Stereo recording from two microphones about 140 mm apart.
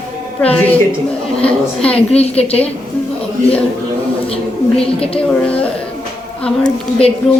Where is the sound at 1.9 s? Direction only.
45° left (ahead or behind).